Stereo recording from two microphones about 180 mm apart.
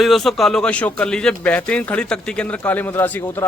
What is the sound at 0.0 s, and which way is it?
Speech, centre (ahead or behind).